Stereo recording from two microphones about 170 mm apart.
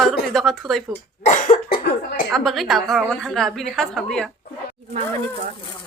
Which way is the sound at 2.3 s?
Centre (ahead or behind).